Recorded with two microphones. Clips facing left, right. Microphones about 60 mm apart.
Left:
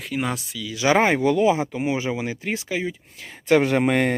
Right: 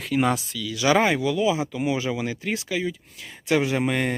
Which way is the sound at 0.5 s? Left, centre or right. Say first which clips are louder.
Left 3 dB; left.